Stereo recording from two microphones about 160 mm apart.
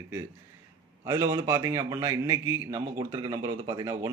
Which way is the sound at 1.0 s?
20° right (ahead or behind).